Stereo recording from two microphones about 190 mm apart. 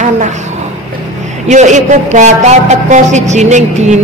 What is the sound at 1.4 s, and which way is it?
A woman's voice, 40° right (ahead or behind).